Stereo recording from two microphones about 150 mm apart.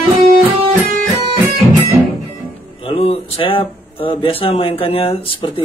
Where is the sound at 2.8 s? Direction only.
40° left (ahead or behind).